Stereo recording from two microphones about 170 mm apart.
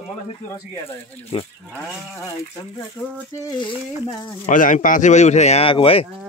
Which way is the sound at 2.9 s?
10° left (ahead or behind).